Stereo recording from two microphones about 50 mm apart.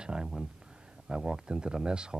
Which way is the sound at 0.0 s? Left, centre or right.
Centre.